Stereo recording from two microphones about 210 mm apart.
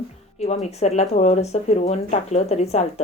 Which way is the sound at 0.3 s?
30° left (ahead or behind).